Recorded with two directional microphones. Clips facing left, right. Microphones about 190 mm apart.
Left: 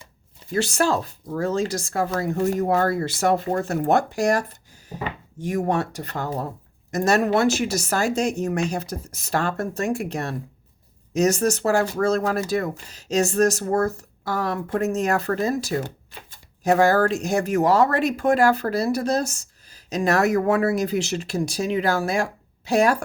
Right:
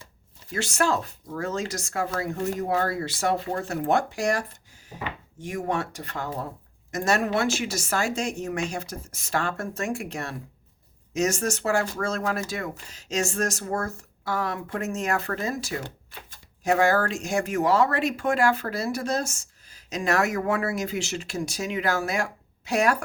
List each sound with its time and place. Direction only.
0.5 s speech: 35° left (ahead or behind)